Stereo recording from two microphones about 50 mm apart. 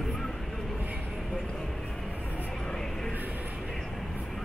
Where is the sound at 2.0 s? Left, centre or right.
Left.